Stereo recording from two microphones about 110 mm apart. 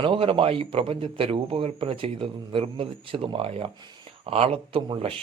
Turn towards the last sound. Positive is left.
turn(degrees=-55)  # may be behind; listen again after turning